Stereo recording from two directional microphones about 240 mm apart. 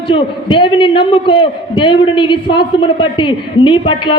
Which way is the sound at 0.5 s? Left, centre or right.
Centre.